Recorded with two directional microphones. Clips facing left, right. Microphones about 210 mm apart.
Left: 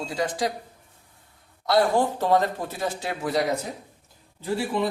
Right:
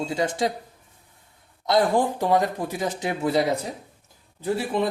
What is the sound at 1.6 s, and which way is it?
Speech, 20° right (ahead or behind).